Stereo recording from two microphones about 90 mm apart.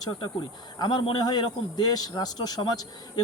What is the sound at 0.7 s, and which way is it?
Speech, 55° left (ahead or behind).